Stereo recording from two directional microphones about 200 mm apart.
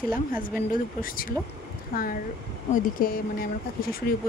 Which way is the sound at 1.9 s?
45° left (ahead or behind).